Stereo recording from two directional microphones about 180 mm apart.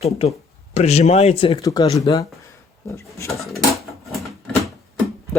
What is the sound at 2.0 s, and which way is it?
Speech, 20° left (ahead or behind).